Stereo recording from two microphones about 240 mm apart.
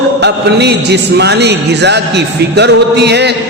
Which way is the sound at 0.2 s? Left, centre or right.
Right.